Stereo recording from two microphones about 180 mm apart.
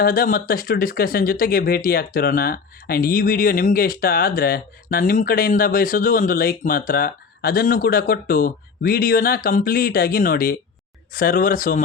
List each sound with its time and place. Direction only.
0.0 s speech: 55° left (ahead or behind)